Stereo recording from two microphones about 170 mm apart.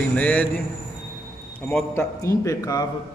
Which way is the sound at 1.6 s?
10° left (ahead or behind).